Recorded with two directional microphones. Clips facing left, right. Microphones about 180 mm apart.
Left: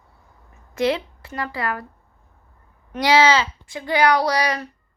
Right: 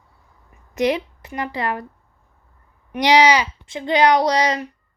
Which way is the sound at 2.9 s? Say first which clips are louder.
Right 2 dB; 15° right (ahead or behind).